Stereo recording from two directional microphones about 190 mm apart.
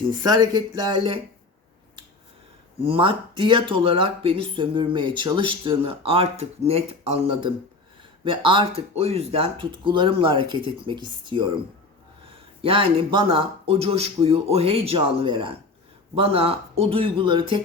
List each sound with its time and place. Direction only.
0.2 s speech: 20° right (ahead or behind)
2.8 s speech: 30° right (ahead or behind)
12.6 s speech: 30° right (ahead or behind)